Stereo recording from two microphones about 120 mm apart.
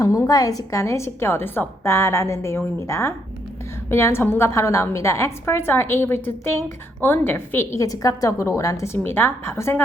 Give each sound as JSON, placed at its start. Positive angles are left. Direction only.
{"t": 0.0, "sound": "a woman's voice", "side_deg": 30}